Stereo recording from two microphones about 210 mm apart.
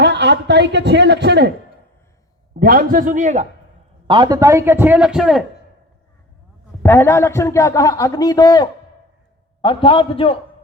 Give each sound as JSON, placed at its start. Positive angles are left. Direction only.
{"t": 0.0, "sound": "a man's voice", "side_deg": -55}
{"t": 2.6, "sound": "a man's voice", "side_deg": -45}
{"t": 4.0, "sound": "a man's voice", "side_deg": -20}
{"t": 6.8, "sound": "a man's voice", "side_deg": 10}